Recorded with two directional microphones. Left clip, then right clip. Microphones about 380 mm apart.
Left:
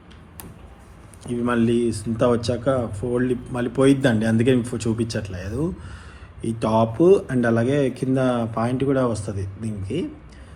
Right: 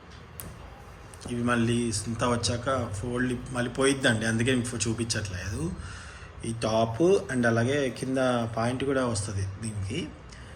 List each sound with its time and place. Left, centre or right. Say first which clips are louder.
1.3 s speech: left 6 dB; centre